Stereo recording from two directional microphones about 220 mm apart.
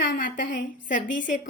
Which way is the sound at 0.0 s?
40° left (ahead or behind).